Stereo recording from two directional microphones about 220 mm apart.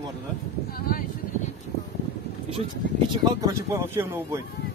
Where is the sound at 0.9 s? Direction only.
40° left (ahead or behind).